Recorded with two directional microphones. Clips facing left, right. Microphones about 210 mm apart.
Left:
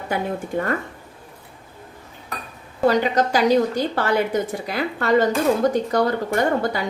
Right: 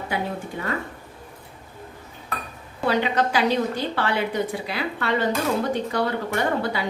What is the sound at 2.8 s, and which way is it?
A woman's voice, 40° left (ahead or behind).